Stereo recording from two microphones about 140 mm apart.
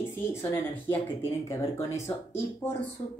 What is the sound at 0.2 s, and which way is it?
Speech, 15° left (ahead or behind).